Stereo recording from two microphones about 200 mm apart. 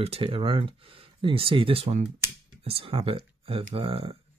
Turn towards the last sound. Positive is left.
turn(degrees=-30)  # may be behind; listen again after turning